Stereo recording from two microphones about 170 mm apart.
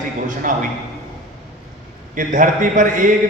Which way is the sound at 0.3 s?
50° right (ahead or behind).